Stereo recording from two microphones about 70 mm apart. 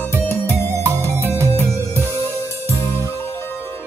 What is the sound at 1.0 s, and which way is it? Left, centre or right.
Music, left.